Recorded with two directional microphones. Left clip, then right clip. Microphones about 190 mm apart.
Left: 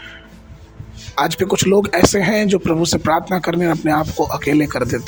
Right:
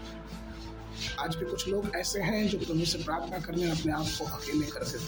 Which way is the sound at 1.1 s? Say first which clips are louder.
Left 18 dB; 50° left (ahead or behind).